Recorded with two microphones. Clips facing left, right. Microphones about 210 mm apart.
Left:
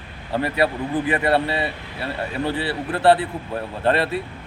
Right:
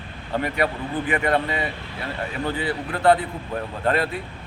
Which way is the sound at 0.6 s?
35° left (ahead or behind).